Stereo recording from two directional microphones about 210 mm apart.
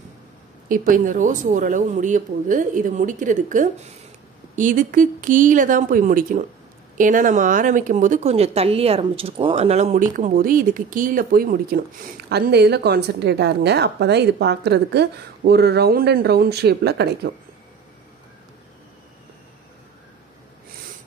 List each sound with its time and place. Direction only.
0.7 s a woman's voice: 40° right (ahead or behind)